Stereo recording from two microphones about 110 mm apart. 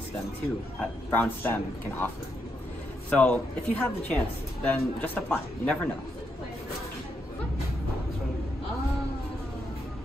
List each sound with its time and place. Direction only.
0.7 s a man's voice: 15° left (ahead or behind)
3.1 s a man's voice: 10° left (ahead or behind)